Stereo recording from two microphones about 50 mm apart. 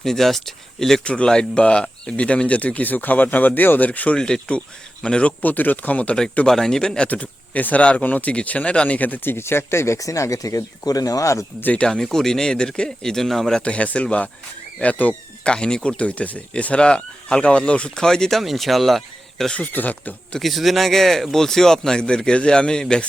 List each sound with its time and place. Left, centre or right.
0.0 s speech: centre
1.0 s speech: left
4.2 s speech: centre
5.4 s speech: left
6.4 s speech: centre
7.1 s speech: left
9.3 s speech: left
11.8 s speech: centre
13.6 s speech: left
15.4 s speech: centre
18.0 s speech: centre
19.5 s speech: left
20.4 s speech: centre